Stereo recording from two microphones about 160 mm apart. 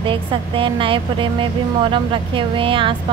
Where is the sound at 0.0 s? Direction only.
35° right (ahead or behind).